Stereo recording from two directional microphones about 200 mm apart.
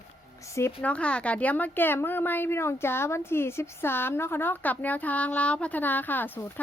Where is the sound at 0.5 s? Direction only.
10° left (ahead or behind).